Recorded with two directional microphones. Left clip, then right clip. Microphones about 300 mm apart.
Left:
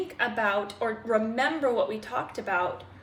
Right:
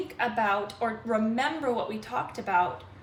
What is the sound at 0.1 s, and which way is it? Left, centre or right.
A woman's voice, centre.